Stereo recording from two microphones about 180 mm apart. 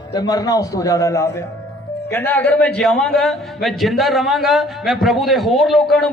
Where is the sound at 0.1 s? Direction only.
20° left (ahead or behind).